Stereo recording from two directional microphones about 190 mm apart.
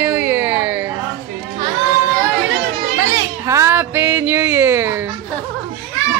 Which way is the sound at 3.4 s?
15° right (ahead or behind).